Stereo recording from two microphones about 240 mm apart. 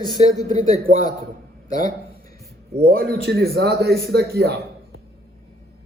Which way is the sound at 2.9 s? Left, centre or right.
Right.